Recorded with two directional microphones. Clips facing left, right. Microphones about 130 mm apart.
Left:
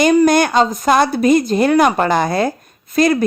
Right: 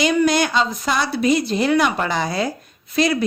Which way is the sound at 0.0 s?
45° left (ahead or behind).